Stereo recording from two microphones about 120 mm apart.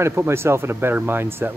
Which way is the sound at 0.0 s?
20° right (ahead or behind).